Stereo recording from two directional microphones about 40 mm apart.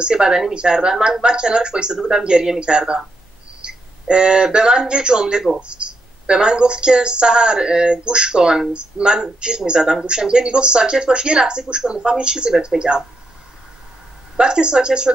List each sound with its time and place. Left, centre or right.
0.0 s speech: right
3.6 s speech: right
14.3 s speech: right